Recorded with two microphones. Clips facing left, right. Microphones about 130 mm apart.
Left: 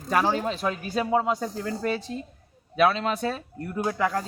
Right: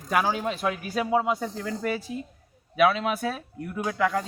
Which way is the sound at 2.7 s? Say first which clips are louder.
Even; 5° right (ahead or behind).